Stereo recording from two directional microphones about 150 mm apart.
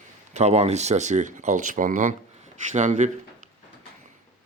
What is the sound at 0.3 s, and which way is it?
Speech, 45° right (ahead or behind).